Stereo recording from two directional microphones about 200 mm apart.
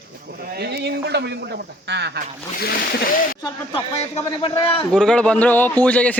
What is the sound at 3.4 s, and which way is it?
Speech, 30° left (ahead or behind).